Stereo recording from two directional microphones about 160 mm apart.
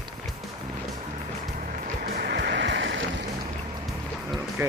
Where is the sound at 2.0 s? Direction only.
70° right (ahead or behind); by 2.9 s 90° right.